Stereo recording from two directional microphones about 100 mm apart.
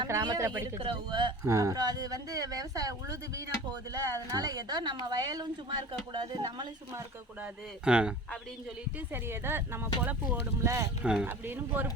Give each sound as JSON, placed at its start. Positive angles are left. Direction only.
{"t": 0.0, "sound": "speech", "side_deg": -40}
{"t": 0.8, "sound": "speech", "side_deg": -55}
{"t": 1.5, "sound": "speech", "side_deg": -30}
{"t": 7.9, "sound": "speech", "side_deg": -10}
{"t": 9.1, "sound": "speech", "side_deg": -20}
{"t": 11.0, "sound": "speech", "side_deg": -10}
{"t": 11.3, "sound": "speech", "side_deg": -20}